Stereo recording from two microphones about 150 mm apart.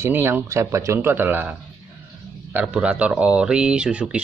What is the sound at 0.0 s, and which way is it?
Speech, 15° right (ahead or behind).